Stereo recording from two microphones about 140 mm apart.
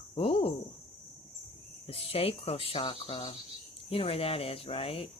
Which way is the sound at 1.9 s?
45° left (ahead or behind).